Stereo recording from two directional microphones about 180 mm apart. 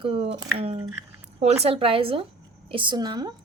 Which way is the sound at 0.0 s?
30° right (ahead or behind).